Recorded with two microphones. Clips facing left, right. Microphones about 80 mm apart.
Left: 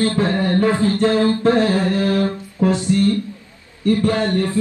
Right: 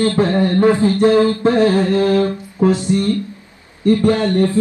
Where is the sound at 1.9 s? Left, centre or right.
Right.